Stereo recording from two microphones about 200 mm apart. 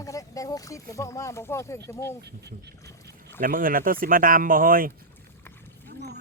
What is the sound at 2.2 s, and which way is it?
Speech, 55° right (ahead or behind).